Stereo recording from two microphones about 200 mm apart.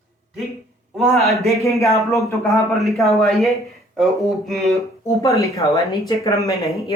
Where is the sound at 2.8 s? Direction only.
Centre (ahead or behind).